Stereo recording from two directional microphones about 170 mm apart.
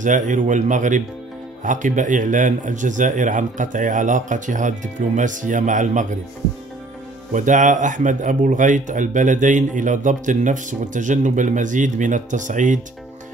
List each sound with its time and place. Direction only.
0.0 s speech: 50° right (ahead or behind)
7.3 s speech: 50° right (ahead or behind)